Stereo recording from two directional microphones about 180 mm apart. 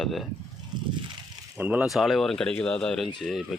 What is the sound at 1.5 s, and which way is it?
Speech, 10° right (ahead or behind).